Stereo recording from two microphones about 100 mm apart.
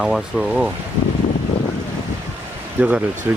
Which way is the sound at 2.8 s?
15° right (ahead or behind).